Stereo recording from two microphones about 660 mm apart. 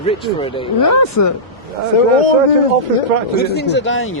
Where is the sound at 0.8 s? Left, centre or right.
Left.